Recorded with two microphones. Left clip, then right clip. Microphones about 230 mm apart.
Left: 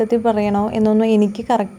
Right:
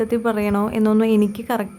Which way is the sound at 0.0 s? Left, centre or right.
Centre.